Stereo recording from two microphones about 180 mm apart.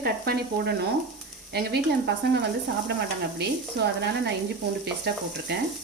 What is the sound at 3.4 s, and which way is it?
Speech, 70° right (ahead or behind).